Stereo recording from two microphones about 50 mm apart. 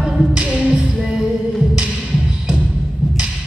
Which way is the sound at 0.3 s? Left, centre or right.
Right.